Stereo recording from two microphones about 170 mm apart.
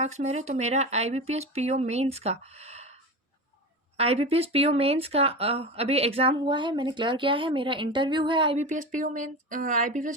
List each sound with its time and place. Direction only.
0.0 s speech: 40° right (ahead or behind)
3.9 s speech: 35° right (ahead or behind)
8.5 s speech: 45° right (ahead or behind)